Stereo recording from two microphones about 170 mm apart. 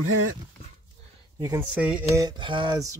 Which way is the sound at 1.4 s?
15° right (ahead or behind).